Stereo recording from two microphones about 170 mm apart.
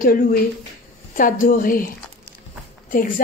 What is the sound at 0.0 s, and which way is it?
A woman's voice, 55° left (ahead or behind).